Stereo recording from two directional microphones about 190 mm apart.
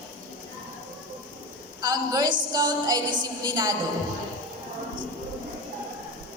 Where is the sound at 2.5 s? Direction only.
20° right (ahead or behind).